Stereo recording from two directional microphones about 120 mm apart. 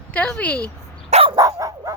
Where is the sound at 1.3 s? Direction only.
30° right (ahead or behind).